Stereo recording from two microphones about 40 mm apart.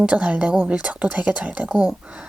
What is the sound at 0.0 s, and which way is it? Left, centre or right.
Speech, right.